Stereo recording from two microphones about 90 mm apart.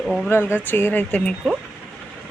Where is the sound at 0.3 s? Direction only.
25° left (ahead or behind).